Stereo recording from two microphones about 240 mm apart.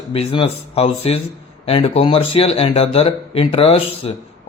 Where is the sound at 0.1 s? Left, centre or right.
Left.